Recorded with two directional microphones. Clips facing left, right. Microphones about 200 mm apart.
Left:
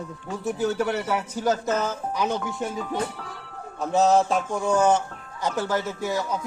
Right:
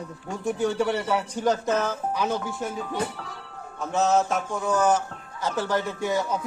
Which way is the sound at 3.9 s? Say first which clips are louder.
Left 3 dB; 35° left (ahead or behind).